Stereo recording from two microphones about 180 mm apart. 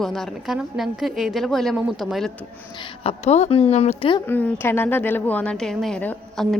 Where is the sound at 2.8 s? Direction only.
35° left (ahead or behind).